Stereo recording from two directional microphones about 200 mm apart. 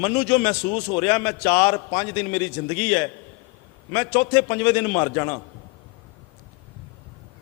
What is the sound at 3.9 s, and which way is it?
A man's voice, 15° left (ahead or behind).